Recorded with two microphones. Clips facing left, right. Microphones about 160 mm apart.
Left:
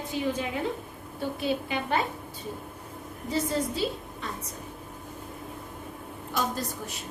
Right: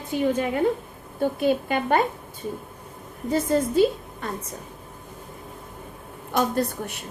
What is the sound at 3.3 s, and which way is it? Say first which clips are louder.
A woman's voice: right 6 dB; 50° right (ahead or behind).